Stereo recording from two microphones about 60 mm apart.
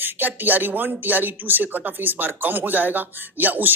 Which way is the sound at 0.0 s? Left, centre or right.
Right.